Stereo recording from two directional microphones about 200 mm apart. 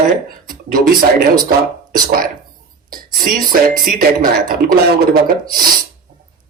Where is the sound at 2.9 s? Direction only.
45° right (ahead or behind).